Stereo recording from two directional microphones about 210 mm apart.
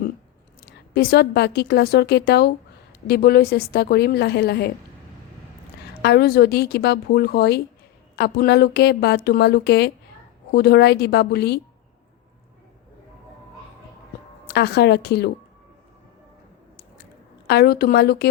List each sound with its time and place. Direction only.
0.6 s a woman's voice: 50° left (ahead or behind)
6.0 s a woman's voice: 50° left (ahead or behind)
14.4 s a woman's voice: 50° left (ahead or behind)
17.4 s a woman's voice: 50° left (ahead or behind)